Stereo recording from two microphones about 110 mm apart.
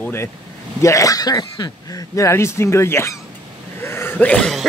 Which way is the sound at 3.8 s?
20° left (ahead or behind).